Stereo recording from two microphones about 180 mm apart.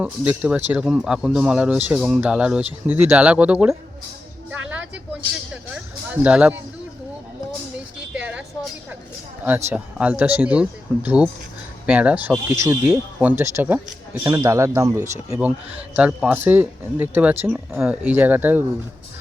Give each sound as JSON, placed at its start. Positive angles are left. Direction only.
{"t": 0.0, "sound": "speech", "side_deg": -5}
{"t": 4.5, "sound": "vehicle", "side_deg": -10}
{"t": 6.2, "sound": "speech", "side_deg": -5}
{"t": 8.1, "sound": "a sound", "side_deg": -5}
{"t": 9.6, "sound": "speech", "side_deg": -5}